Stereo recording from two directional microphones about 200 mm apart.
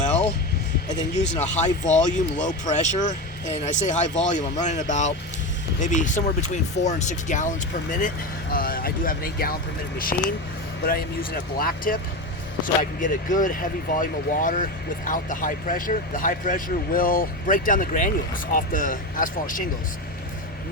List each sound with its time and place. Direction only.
1.4 s speech: 35° left (ahead or behind)